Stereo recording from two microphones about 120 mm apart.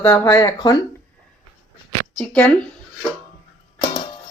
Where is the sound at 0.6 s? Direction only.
40° left (ahead or behind).